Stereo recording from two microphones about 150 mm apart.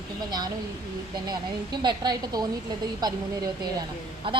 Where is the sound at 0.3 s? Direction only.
25° right (ahead or behind).